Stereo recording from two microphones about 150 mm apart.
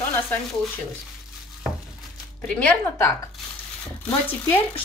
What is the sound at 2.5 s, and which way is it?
A woman's voice, 15° left (ahead or behind).